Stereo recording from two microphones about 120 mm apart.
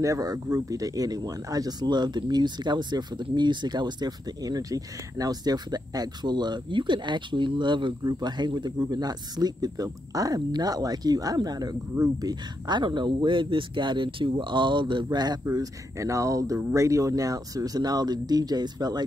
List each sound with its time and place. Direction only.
0.0 s speech: 30° right (ahead or behind)